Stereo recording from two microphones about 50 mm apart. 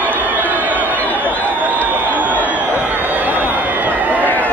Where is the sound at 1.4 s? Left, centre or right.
Right.